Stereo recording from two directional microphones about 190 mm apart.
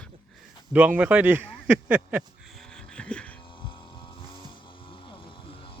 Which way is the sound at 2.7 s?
5° left (ahead or behind).